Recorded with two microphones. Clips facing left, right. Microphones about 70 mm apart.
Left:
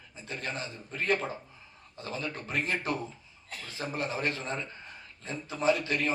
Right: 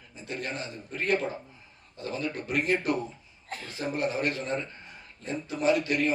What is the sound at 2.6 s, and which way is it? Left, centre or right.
Speech, right.